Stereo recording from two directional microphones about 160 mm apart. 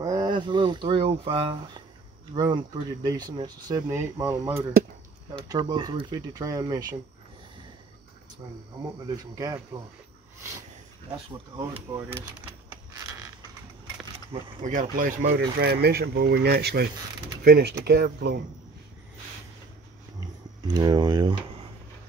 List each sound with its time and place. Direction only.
0.0 s speech: 25° right (ahead or behind)
9.1 s speech: 20° right (ahead or behind)
11.5 s speech: 25° right (ahead or behind)
14.6 s speech: 50° right (ahead or behind); by 18.4 s 85° right
20.6 s speech: 25° right (ahead or behind)